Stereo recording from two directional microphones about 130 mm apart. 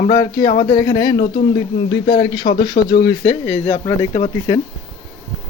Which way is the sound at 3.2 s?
15° left (ahead or behind).